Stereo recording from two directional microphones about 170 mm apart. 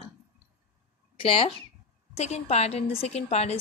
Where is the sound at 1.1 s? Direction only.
35° left (ahead or behind).